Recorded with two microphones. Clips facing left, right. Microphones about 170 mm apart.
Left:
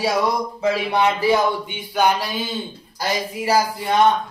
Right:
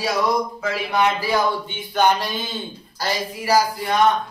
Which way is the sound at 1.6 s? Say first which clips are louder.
Even; 10° left (ahead or behind).